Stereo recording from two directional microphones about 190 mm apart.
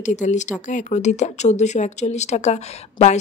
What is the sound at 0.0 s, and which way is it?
Speech, 40° left (ahead or behind).